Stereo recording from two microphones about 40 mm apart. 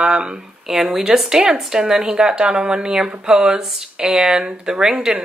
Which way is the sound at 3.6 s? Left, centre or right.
Centre.